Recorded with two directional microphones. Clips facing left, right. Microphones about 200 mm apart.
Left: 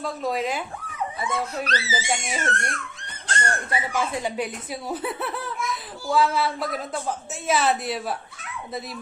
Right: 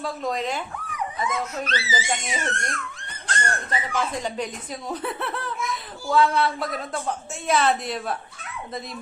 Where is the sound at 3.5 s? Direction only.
10° left (ahead or behind).